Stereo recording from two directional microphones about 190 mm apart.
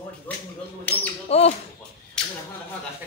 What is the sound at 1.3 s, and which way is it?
Speech, 35° left (ahead or behind).